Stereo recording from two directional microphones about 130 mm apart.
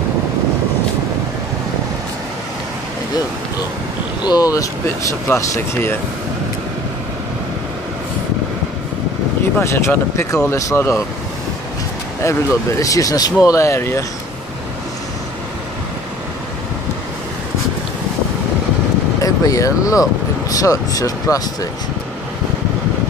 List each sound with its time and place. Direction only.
4.2 s speech: 30° left (ahead or behind)
9.6 s speech: 20° left (ahead or behind)
12.2 s speech: 25° left (ahead or behind)
19.2 s speech: 25° left (ahead or behind)